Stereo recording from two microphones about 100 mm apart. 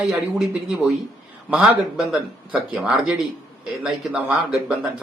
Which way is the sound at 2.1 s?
10° right (ahead or behind).